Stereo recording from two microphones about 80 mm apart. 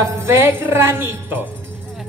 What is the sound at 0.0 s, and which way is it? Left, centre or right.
A woman's voice, right.